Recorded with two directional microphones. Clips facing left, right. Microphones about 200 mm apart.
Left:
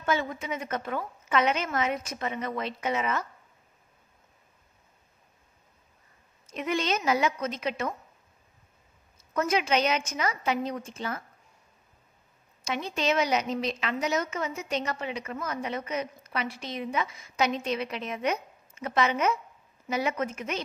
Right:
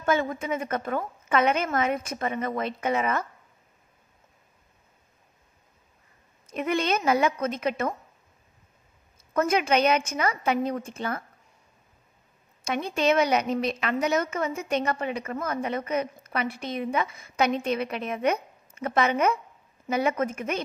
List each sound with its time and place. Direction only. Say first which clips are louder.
0.0 s a woman's voice: right 4 dB; 50° right (ahead or behind)
6.4 s a woman's voice: right 3 dB; 55° right (ahead or behind)
9.3 s a woman's voice: right 3 dB; 50° right (ahead or behind)
12.6 s a woman's voice: right 4 dB; 55° right (ahead or behind)